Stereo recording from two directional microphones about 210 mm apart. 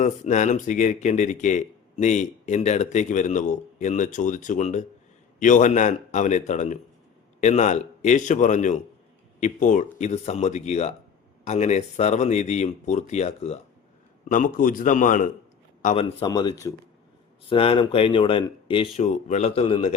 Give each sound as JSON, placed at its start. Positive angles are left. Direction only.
{"t": 0.0, "sound": "speech", "side_deg": 35}